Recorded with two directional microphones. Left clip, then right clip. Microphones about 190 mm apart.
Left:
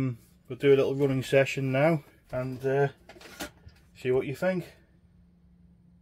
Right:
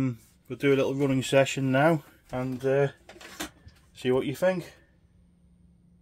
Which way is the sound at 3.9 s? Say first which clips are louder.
Right 1 dB; 50° right (ahead or behind).